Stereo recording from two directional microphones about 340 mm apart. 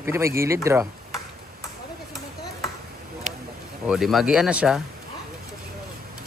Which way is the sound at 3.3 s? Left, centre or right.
Right.